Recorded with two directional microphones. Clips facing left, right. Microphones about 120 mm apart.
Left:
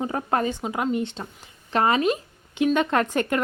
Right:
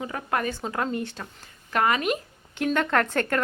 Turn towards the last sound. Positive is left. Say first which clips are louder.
# left 1 dB
turn(degrees=15)  # may be behind; listen again after turning